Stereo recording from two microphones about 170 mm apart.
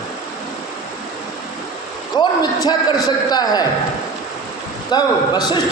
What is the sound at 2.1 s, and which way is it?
A man's voice, 25° left (ahead or behind).